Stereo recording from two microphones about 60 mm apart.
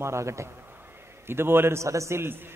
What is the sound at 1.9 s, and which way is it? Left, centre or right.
Speech, right.